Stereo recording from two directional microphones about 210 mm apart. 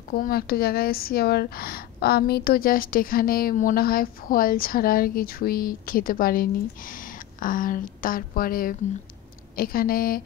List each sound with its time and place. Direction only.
0.1 s speech: 45° left (ahead or behind)